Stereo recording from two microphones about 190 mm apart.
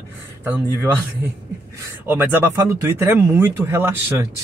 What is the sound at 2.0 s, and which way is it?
Speech, 10° right (ahead or behind).